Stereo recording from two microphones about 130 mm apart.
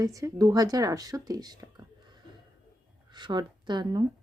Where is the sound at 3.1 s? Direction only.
35° right (ahead or behind).